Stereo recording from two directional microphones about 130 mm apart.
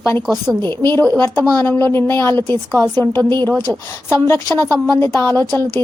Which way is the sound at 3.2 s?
30° right (ahead or behind).